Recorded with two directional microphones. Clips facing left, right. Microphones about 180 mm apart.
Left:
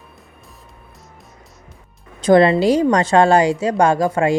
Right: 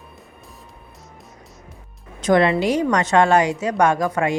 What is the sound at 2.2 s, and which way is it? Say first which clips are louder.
A woman's voice: left 5 dB; 35° left (ahead or behind).